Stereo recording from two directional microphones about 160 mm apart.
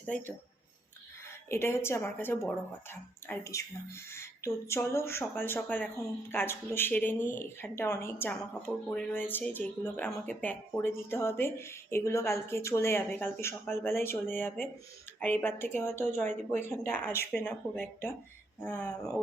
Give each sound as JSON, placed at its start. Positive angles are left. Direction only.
{"t": 0.0, "sound": "speech", "side_deg": 10}
{"t": 1.5, "sound": "speech", "side_deg": 15}